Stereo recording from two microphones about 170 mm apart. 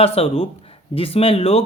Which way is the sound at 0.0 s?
35° left (ahead or behind).